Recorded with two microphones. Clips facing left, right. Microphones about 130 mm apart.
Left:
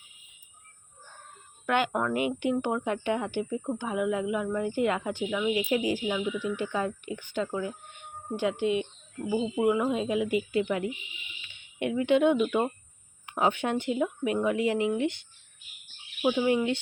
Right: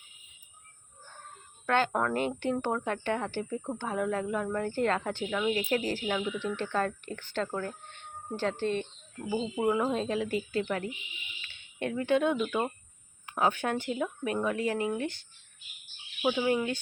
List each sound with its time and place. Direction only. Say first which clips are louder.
1.6 s speech: left 1 dB; 15° left (ahead or behind)
10.0 s speech: left 3 dB; 15° left (ahead or behind)
16.2 s speech: left 3 dB; 10° left (ahead or behind)
16.5 s speech: left 3 dB; 20° left (ahead or behind)